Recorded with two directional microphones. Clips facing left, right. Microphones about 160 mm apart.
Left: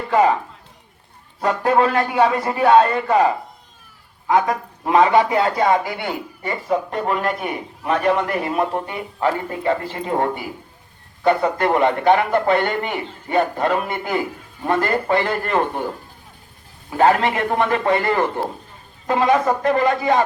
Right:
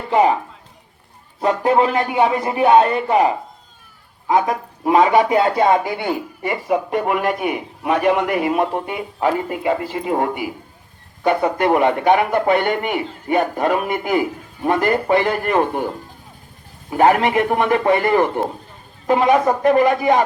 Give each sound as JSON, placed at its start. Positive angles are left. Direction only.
{"t": 1.4, "sound": "a man's voice", "side_deg": -20}
{"t": 17.0, "sound": "a man's voice", "side_deg": -15}